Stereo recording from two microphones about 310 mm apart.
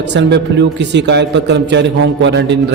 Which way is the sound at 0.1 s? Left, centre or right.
Right.